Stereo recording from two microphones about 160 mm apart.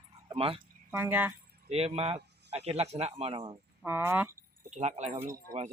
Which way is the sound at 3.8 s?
15° right (ahead or behind).